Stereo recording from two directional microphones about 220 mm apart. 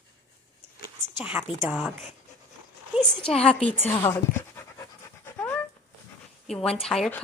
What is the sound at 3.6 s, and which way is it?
A woman's voice, 5° left (ahead or behind).